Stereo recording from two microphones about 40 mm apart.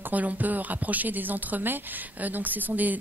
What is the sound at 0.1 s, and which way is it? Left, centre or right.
A woman's voice, right.